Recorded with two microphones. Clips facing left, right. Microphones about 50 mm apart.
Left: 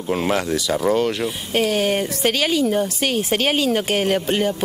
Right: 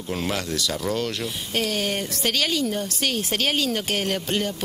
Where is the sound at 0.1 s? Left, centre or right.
Centre.